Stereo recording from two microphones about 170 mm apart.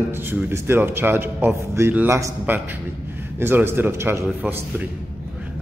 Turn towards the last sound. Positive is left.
turn(degrees=-15)  # may be behind; listen again after turning